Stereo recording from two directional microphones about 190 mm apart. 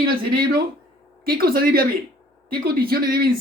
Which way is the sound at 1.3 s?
50° right (ahead or behind).